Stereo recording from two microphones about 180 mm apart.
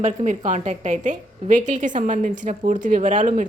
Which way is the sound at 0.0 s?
40° right (ahead or behind).